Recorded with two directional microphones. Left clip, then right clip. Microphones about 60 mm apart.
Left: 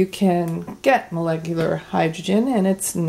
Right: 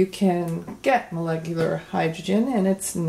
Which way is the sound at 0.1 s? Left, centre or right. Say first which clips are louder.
Left 3 dB; left.